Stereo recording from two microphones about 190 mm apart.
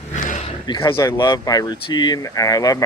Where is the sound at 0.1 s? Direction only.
40° left (ahead or behind).